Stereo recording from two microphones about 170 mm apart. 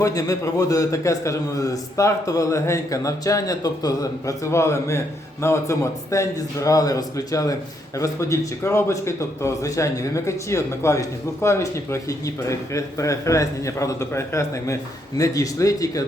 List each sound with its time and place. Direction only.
0.0 s a man's voice: 20° left (ahead or behind)